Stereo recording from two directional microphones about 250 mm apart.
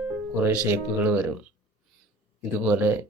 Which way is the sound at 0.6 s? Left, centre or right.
Centre.